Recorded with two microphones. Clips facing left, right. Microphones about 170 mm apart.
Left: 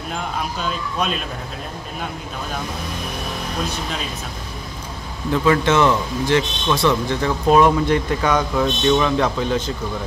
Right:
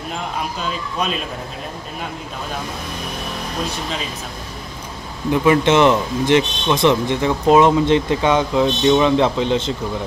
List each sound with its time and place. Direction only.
0.6 s speech: centre (ahead or behind)
5.3 s a man's voice: 15° right (ahead or behind)